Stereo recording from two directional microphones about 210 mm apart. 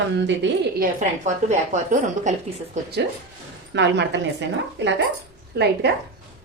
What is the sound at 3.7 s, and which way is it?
A woman's voice, 55° right (ahead or behind).